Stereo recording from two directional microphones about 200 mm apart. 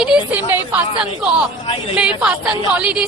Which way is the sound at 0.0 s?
5° right (ahead or behind).